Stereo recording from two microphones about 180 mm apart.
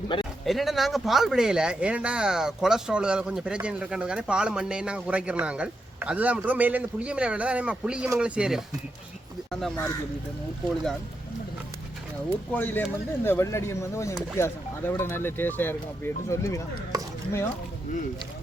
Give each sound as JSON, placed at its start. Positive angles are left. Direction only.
{"t": 0.1, "sound": "speech", "side_deg": 25}
{"t": 0.4, "sound": "speech", "side_deg": 0}
{"t": 12.5, "sound": "speech", "side_deg": 10}